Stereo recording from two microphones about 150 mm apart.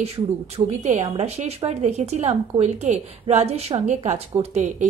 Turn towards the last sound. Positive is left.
turn(degrees=-55)  # may be behind; listen again after turning